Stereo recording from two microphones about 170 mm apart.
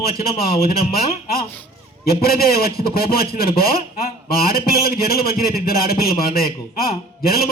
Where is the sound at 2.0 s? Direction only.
65° left (ahead or behind).